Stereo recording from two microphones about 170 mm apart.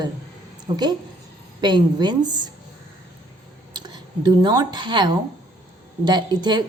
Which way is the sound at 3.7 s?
25° right (ahead or behind).